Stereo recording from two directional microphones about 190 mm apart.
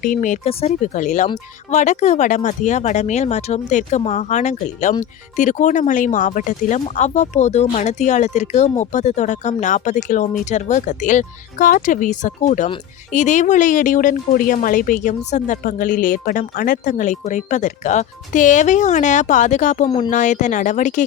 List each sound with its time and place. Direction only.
0.0 s speech: 45° left (ahead or behind)